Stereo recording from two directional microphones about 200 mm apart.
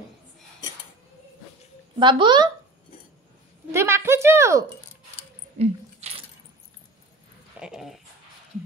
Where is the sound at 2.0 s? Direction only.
25° right (ahead or behind).